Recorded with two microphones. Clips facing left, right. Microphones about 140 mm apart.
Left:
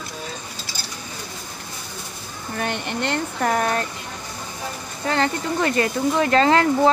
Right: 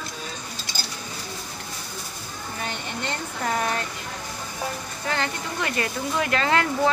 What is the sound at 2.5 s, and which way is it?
Speech, 65° left (ahead or behind).